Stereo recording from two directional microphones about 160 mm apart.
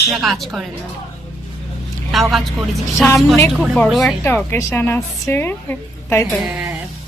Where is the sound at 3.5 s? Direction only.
Centre (ahead or behind).